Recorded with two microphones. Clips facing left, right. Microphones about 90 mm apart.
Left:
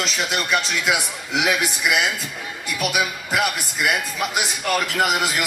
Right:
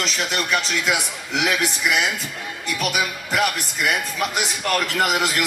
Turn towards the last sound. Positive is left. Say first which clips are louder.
# even
turn(degrees=0)  # may be behind; listen again after turning